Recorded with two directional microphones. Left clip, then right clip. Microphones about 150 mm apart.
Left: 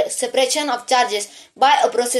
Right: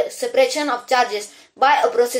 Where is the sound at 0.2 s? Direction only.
50° left (ahead or behind).